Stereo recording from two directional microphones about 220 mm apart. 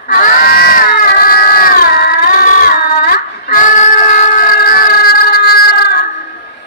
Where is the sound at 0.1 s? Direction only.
40° left (ahead or behind).